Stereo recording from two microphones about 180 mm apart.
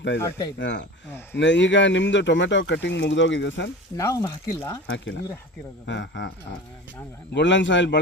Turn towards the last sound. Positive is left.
turn(degrees=85)